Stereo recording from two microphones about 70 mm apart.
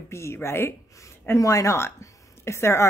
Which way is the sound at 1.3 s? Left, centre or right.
Left.